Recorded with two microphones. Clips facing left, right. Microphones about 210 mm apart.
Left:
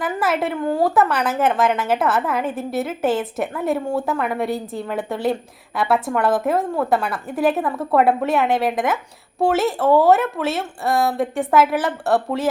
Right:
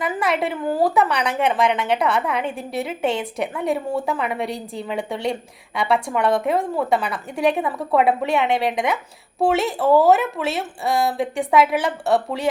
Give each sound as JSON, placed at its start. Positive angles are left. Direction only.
{"t": 0.0, "sound": "a woman's voice", "side_deg": 0}